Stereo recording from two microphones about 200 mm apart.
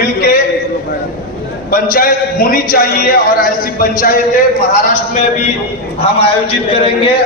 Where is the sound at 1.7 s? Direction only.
45° left (ahead or behind).